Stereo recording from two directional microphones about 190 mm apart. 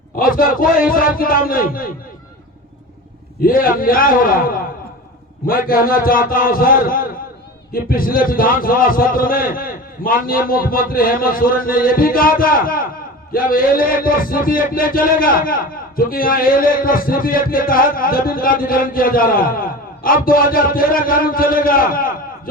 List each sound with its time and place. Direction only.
0.2 s music: 50° left (ahead or behind)
3.4 s music: 50° left (ahead or behind)